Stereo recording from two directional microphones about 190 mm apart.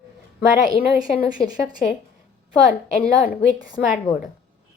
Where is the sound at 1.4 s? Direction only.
25° left (ahead or behind).